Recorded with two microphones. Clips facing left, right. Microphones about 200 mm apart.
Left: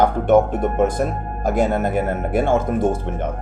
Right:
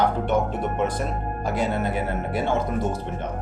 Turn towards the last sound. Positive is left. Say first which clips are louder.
# left 6 dB
turn(degrees=50)  # may be behind; listen again after turning